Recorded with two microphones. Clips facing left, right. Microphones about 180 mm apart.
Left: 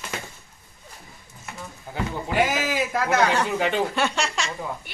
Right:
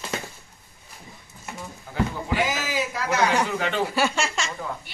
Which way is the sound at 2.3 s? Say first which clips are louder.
Left 3 dB; 55° left (ahead or behind).